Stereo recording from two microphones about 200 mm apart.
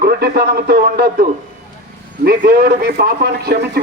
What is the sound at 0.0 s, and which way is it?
Speech, 50° right (ahead or behind).